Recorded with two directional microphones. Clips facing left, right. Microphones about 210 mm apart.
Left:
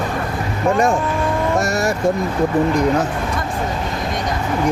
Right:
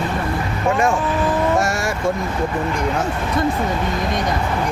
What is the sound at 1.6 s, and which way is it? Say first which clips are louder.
Vehicle: left 2 dB; 40° left (ahead or behind).